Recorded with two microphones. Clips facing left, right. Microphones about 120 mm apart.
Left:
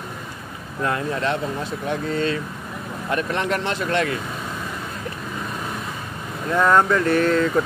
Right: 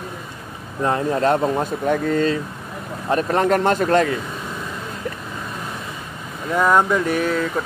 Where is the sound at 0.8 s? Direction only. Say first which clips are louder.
Right 5 dB; 30° right (ahead or behind).